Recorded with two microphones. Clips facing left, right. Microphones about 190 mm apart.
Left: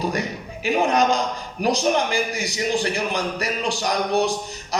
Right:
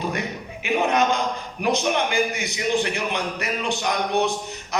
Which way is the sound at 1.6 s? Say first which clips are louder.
Left 2 dB; 35° left (ahead or behind).